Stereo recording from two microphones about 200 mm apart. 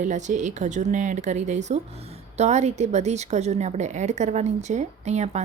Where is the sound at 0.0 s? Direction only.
35° right (ahead or behind).